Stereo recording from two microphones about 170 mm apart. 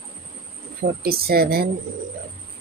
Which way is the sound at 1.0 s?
65° right (ahead or behind).